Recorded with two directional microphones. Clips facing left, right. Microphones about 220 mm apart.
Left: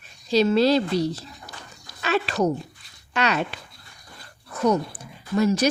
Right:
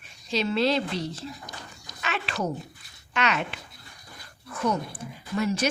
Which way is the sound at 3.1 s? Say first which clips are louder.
Left 3 dB; 35° left (ahead or behind).